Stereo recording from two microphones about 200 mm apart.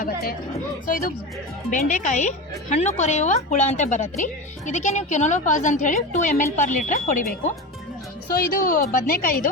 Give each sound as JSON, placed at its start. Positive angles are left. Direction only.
{"t": 0.0, "sound": "a woman's voice", "side_deg": 50}
{"t": 1.7, "sound": "a woman's voice", "side_deg": 40}
{"t": 8.5, "sound": "a woman's voice", "side_deg": 45}